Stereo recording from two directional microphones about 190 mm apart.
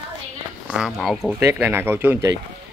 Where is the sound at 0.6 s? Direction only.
5° right (ahead or behind).